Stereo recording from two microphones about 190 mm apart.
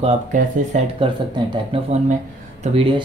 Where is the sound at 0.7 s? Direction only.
40° right (ahead or behind).